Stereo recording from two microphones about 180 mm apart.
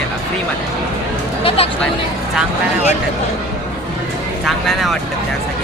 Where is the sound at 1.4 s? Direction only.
30° left (ahead or behind).